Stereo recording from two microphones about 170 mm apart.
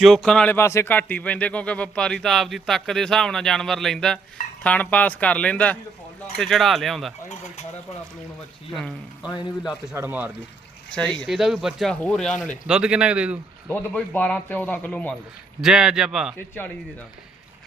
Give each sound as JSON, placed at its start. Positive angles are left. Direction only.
{"t": 0.0, "sound": "speech", "side_deg": 0}
{"t": 9.2, "sound": "speech", "side_deg": 25}
{"t": 9.9, "sound": "speech", "side_deg": -15}
{"t": 13.7, "sound": "speech", "side_deg": 10}
{"t": 15.6, "sound": "speech", "side_deg": -5}